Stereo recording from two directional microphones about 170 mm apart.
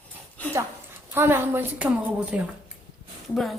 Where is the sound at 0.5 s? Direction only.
15° right (ahead or behind).